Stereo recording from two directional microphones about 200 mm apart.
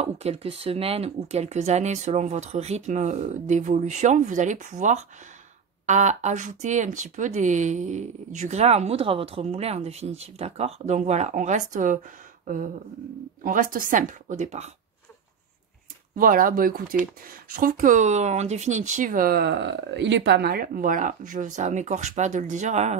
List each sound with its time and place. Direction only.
0.0 s speech: 30° right (ahead or behind)
13.4 s speech: 45° right (ahead or behind)
16.2 s speech: 45° right (ahead or behind)